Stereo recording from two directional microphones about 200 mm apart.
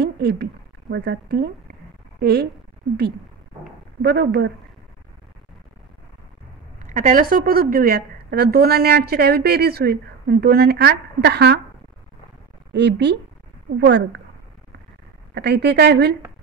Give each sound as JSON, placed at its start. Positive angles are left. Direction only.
{"t": 0.0, "sound": "a woman's voice", "side_deg": -55}
{"t": 4.0, "sound": "a woman's voice", "side_deg": -55}
{"t": 6.9, "sound": "a woman's voice", "side_deg": -40}
{"t": 12.7, "sound": "a woman's voice", "side_deg": -60}
{"t": 15.3, "sound": "a woman's voice", "side_deg": -55}